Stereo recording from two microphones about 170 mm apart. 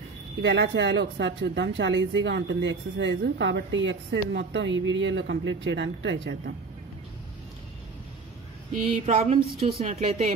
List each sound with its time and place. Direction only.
0.4 s speech: 90° right
9.0 s speech: 40° right (ahead or behind)